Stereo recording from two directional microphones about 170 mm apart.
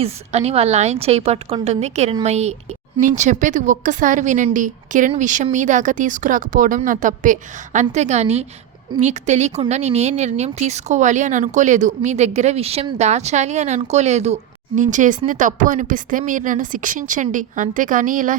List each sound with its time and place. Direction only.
0.0 s speech: 35° right (ahead or behind)